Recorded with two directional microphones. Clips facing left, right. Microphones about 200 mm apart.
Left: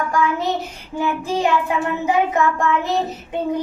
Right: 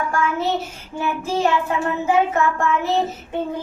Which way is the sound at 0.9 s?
15° left (ahead or behind).